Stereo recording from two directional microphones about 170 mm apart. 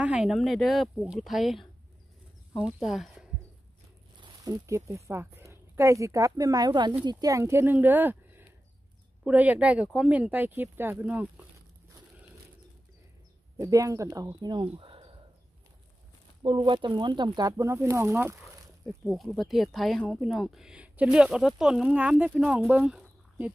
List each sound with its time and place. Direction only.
0.0 s speech: 5° right (ahead or behind)
4.2 s speech: 20° right (ahead or behind)
13.6 s speech: 20° right (ahead or behind)
16.4 s speech: 30° right (ahead or behind)
19.0 s speech: centre (ahead or behind)